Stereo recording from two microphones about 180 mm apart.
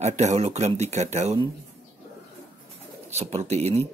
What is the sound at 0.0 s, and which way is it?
Speech, 40° right (ahead or behind).